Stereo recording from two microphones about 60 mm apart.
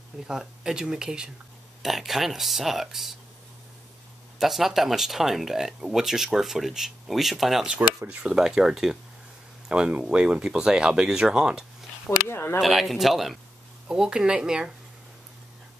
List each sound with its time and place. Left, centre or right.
0.3 s speech: centre
4.4 s speech: centre
12.3 s a sound: left
12.5 s speech: centre
13.8 s speech: centre